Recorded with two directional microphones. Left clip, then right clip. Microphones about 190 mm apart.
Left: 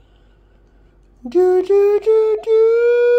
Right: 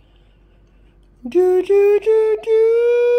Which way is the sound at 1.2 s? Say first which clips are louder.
Left 1 dB; 5° right (ahead or behind).